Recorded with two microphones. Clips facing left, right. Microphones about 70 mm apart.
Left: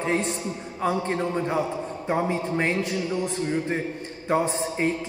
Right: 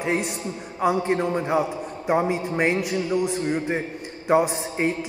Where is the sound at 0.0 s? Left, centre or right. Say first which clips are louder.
Even; centre.